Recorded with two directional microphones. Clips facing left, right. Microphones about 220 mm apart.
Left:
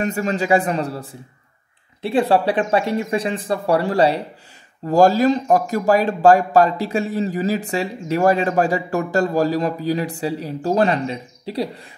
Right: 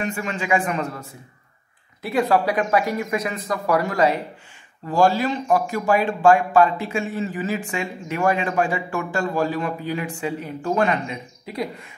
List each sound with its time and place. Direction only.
0.0 s speech: 40° left (ahead or behind)